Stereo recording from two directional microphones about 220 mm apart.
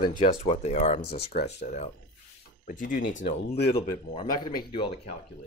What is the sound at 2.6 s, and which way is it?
Speech, 35° left (ahead or behind).